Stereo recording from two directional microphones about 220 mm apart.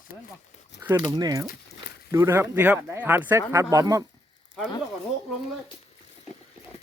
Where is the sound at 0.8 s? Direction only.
10° right (ahead or behind).